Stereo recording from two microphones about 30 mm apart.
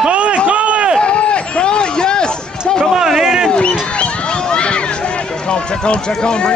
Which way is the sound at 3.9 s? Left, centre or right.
Left.